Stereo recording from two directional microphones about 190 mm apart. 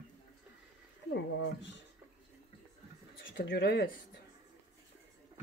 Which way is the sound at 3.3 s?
65° left (ahead or behind).